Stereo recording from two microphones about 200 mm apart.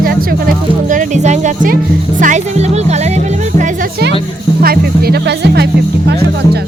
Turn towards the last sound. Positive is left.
turn(degrees=-55)  # may be behind; listen again after turning